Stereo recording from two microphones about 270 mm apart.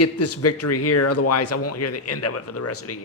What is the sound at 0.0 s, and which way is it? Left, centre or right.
Speech, left.